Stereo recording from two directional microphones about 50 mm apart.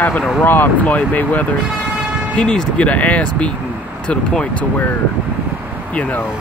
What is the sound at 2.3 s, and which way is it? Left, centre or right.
Speech, centre.